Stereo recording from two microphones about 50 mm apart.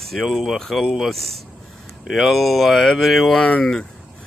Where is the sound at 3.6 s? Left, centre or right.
Centre.